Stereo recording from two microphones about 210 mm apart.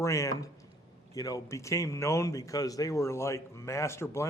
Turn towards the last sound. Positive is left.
turn(degrees=15)  # may be behind; listen again after turning